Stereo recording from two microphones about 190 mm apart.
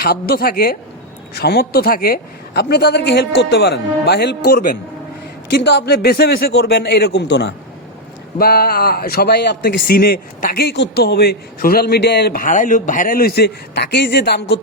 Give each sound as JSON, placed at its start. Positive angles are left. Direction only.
{"t": 0.0, "sound": "a man's voice", "side_deg": 50}
{"t": 5.5, "sound": "a man's voice", "side_deg": 60}
{"t": 9.8, "sound": "a man's voice", "side_deg": 55}